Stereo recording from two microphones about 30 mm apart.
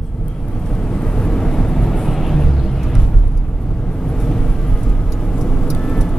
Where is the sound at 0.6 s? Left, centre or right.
Centre.